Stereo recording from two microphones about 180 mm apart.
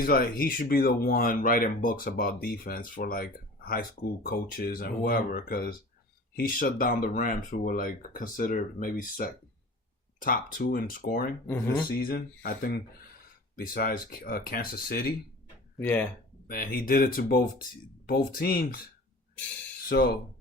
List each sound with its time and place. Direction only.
0.0 s speech: 55° left (ahead or behind)
11.4 s speech: 15° left (ahead or behind)
12.0 s speech: 55° left (ahead or behind)
15.8 s speech: 10° left (ahead or behind)
16.5 s speech: 55° left (ahead or behind)